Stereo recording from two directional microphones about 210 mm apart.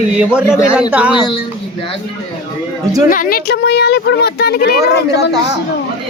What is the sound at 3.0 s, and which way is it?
Speech, 40° left (ahead or behind).